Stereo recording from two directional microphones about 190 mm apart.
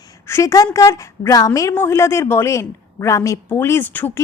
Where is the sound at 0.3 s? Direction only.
15° left (ahead or behind).